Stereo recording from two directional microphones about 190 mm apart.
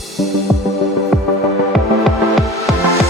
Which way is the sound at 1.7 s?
Centre (ahead or behind).